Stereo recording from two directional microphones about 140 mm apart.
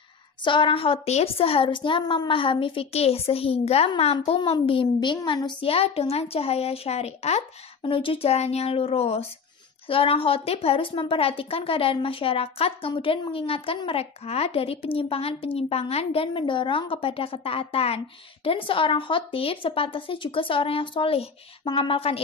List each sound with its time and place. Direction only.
0.4 s a woman's voice: 35° left (ahead or behind); by 7.4 s 50° left (ahead or behind)
7.8 s a woman's voice: 40° left (ahead or behind)